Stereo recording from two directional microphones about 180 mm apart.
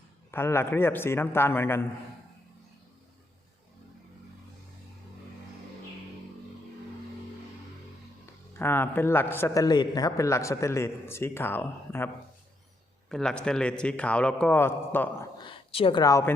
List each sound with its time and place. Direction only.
0.3 s a man's voice: 15° left (ahead or behind)
8.5 s a man's voice: 10° left (ahead or behind)
15.4 s speech: 30° left (ahead or behind)